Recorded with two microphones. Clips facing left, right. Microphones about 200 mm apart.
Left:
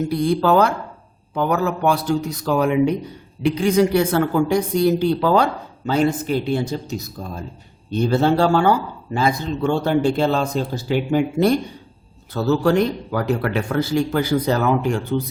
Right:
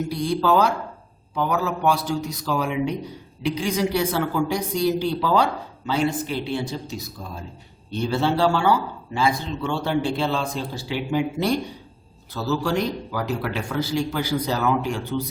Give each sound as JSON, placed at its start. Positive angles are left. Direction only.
{"t": 0.1, "sound": "a man's voice", "side_deg": 55}